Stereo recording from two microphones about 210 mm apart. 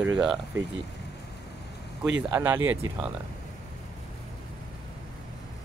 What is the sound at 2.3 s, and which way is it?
Speech, 10° right (ahead or behind).